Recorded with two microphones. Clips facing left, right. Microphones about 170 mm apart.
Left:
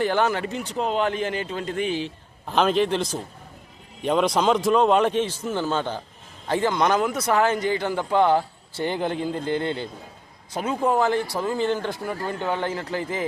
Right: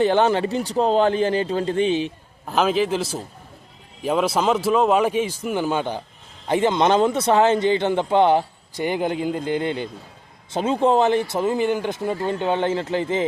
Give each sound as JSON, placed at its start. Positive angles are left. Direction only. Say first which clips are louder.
{"t": 0.0, "sound": "a man's voice", "louder": "right 5 dB", "side_deg": -20}
{"t": 2.5, "sound": "a man's voice", "louder": "right 1 dB", "side_deg": -5}
{"t": 10.5, "sound": "speech", "louder": "right 4 dB", "side_deg": -25}